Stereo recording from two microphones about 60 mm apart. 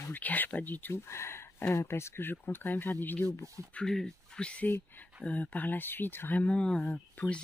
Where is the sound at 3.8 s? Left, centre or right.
Centre.